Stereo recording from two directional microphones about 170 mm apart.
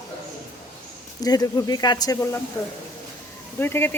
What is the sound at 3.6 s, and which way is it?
Speech, 15° left (ahead or behind).